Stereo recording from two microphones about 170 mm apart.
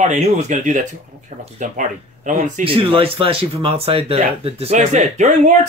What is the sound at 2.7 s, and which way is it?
Speech, 30° right (ahead or behind).